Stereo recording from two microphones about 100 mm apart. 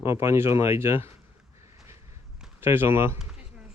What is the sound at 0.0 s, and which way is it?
Speech, 25° right (ahead or behind).